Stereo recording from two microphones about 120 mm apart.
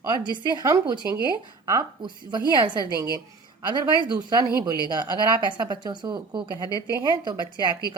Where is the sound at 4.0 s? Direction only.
40° right (ahead or behind).